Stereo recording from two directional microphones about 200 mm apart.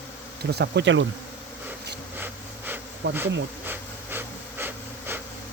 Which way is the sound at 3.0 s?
65° right (ahead or behind).